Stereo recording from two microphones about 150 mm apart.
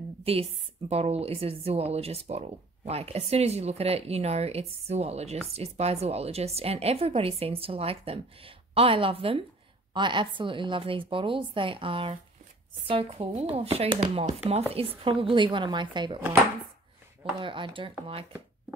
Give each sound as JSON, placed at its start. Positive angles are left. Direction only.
{"t": 0.2, "sound": "a woman's voice", "side_deg": -40}
{"t": 17.2, "sound": "a woman's voice", "side_deg": -35}